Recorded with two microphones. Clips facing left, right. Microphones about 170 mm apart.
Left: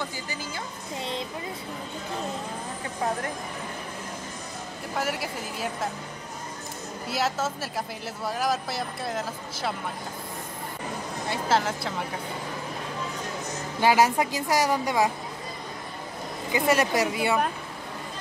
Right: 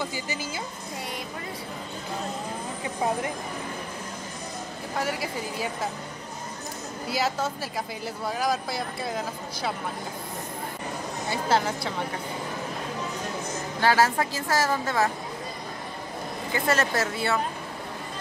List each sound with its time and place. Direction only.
0.0 s a woman's voice: 5° right (ahead or behind)
4.9 s speech: centre (ahead or behind)
7.1 s speech: centre (ahead or behind)
11.2 s speech: centre (ahead or behind)
13.7 s a woman's voice: 15° left (ahead or behind)
16.5 s a woman's voice: 15° left (ahead or behind)